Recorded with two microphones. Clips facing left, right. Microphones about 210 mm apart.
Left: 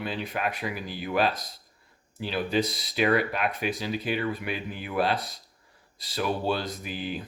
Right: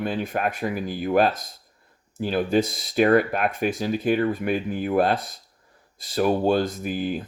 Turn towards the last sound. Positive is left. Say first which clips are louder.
# right 7 dB
turn(degrees=-45)  # may be behind; listen again after turning